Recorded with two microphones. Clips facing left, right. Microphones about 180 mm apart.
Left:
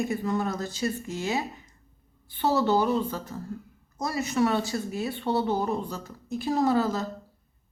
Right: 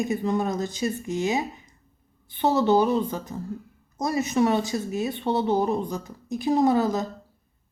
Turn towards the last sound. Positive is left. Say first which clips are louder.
# right 3 dB
turn(degrees=-15)  # may be behind; listen again after turning